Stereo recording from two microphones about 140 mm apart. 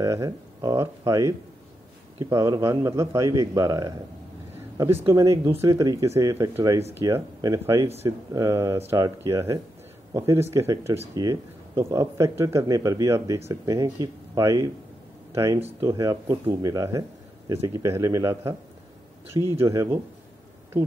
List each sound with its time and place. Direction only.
0.0 s speech: 25° right (ahead or behind)
5.0 s speech: 20° right (ahead or behind)